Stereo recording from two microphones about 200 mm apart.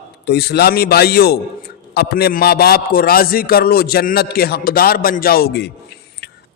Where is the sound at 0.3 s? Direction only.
55° left (ahead or behind).